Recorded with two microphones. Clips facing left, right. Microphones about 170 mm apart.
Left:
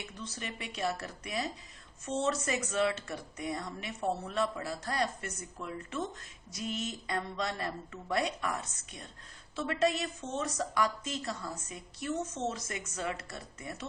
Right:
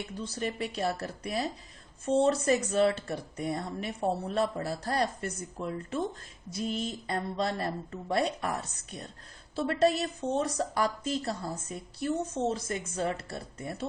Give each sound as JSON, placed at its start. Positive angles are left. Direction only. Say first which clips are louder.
{"t": 0.0, "sound": "a woman's voice", "louder": "right 8 dB", "side_deg": -35}